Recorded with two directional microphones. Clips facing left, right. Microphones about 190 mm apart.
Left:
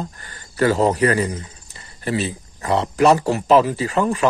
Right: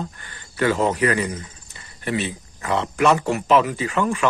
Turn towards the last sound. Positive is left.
turn(degrees=35)  # may be behind; listen again after turning